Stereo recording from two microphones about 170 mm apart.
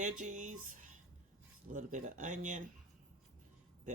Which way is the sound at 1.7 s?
45° right (ahead or behind).